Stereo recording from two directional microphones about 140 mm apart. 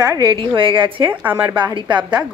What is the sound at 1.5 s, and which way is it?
Speech, 35° right (ahead or behind).